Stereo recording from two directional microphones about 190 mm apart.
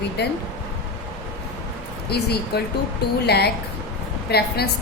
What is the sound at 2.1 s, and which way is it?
A woman's voice, 60° left (ahead or behind).